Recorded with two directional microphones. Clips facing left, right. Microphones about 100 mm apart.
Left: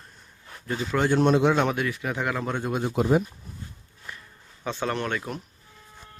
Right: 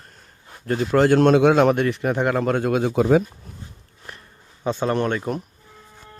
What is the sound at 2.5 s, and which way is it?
Speech, 75° right (ahead or behind).